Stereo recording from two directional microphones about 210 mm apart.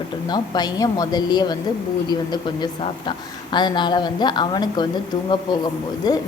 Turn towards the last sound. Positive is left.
turn(degrees=20)  # may be behind; listen again after turning